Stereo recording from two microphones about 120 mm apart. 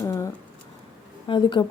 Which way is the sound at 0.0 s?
25° left (ahead or behind).